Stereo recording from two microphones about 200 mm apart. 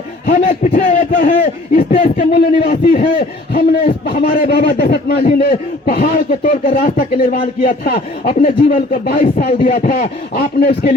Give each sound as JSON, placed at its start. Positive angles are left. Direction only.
{"t": 0.3, "sound": "a man's voice", "side_deg": 40}